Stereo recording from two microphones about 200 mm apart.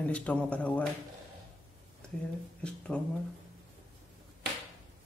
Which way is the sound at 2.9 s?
5° left (ahead or behind).